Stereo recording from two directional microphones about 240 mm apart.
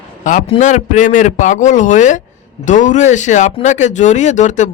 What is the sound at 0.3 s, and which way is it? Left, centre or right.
A man's voice, left.